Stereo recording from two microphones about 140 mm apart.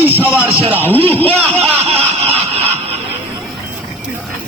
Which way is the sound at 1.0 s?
10° left (ahead or behind).